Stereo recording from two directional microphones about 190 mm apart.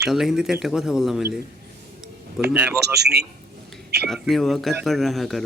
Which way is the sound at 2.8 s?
60° right (ahead or behind).